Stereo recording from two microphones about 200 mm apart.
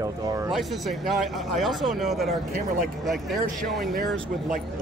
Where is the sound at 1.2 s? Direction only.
Centre (ahead or behind).